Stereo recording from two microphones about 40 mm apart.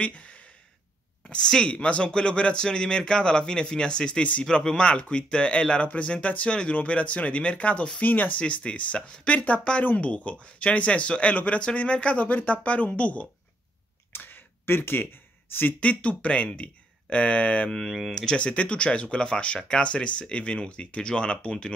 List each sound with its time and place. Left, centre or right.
0.0 s a sound: left
1.3 s speech: left
8.4 s speech: left
14.1 s a sound: left
15.8 s speech: left
17.6 s speech: centre
18.4 s speech: left